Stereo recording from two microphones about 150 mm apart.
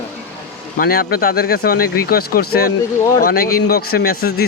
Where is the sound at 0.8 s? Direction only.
85° left.